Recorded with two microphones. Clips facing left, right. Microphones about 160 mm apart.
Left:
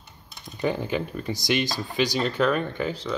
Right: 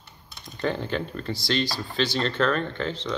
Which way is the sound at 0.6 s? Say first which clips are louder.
Left 1 dB; 10° left (ahead or behind).